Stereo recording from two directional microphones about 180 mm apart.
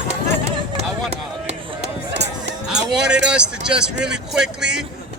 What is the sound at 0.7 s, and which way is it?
Chop, 35° right (ahead or behind).